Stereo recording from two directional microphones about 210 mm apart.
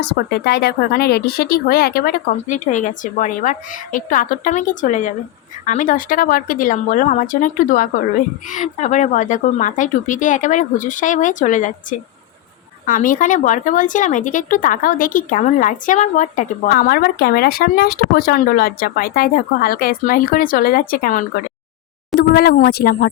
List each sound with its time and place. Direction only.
0.0 s speech: 50° left (ahead or behind)